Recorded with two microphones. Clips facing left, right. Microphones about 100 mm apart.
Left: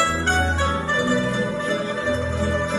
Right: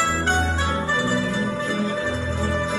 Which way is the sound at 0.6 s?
Centre (ahead or behind).